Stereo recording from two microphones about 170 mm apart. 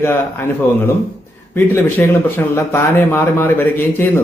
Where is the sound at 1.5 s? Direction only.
10° left (ahead or behind).